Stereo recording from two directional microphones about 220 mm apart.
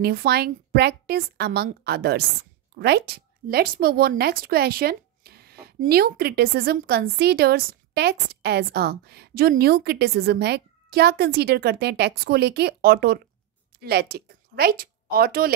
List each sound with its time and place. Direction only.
0.0 s a woman's voice: 45° right (ahead or behind)